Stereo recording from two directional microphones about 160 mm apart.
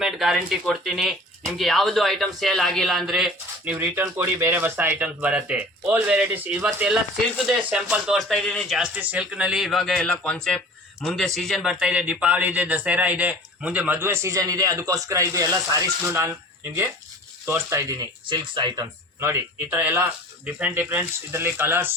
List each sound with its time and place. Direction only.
0.0 s speech: centre (ahead or behind)
8.8 s speech: 10° right (ahead or behind)
17.4 s speech: 15° right (ahead or behind)
19.2 s speech: 15° right (ahead or behind)